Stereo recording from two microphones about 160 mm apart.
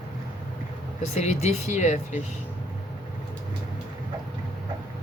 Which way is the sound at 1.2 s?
45° left (ahead or behind).